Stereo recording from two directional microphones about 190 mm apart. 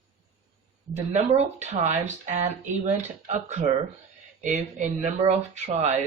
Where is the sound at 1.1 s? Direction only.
35° right (ahead or behind).